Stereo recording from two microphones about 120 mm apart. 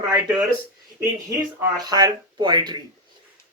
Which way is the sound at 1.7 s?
35° right (ahead or behind).